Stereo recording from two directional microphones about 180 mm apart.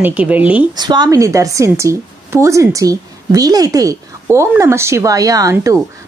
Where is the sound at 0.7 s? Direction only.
25° right (ahead or behind).